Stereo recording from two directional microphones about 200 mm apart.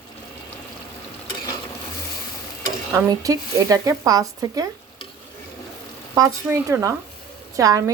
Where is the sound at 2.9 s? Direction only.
15° right (ahead or behind).